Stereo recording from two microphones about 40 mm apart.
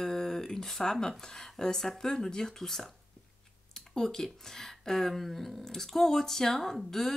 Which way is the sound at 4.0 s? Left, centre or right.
Centre.